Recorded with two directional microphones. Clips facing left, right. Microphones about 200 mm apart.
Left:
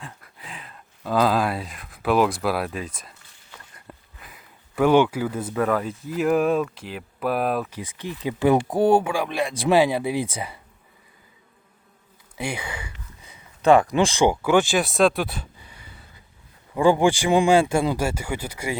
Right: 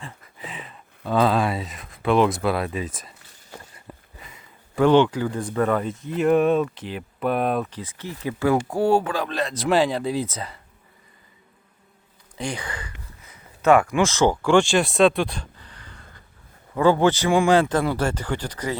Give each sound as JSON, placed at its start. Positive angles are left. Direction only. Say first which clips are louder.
{"t": 0.0, "sound": "speech", "louder": "right 3 dB", "side_deg": 0}
{"t": 4.2, "sound": "speech", "louder": "right 1 dB", "side_deg": 5}
{"t": 7.8, "sound": "speech", "louder": "left 2 dB", "side_deg": 15}
{"t": 12.4, "sound": "a sound", "louder": "even", "side_deg": 10}
{"t": 13.7, "sound": "speech", "louder": "left 1 dB", "side_deg": 30}
{"t": 14.0, "sound": "speech", "louder": "even", "side_deg": 15}